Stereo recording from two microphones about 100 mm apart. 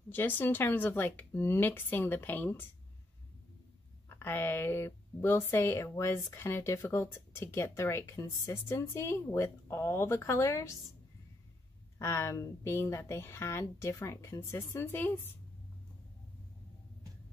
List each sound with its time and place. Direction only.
0.1 s speech: 20° left (ahead or behind)
4.2 s speech: 20° left (ahead or behind)
12.0 s speech: 30° left (ahead or behind)